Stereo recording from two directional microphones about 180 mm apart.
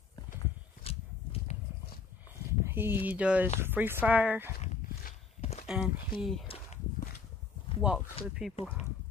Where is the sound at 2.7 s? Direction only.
10° right (ahead or behind).